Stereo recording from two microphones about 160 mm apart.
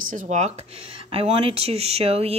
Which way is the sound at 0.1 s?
50° right (ahead or behind).